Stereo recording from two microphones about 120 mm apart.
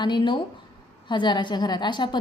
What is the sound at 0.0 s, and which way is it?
A woman's voice, 40° left (ahead or behind).